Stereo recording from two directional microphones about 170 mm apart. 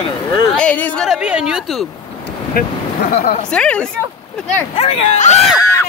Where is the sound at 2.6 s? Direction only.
60° left (ahead or behind).